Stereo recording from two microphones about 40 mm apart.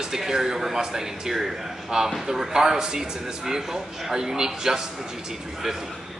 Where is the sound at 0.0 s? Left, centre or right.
Centre.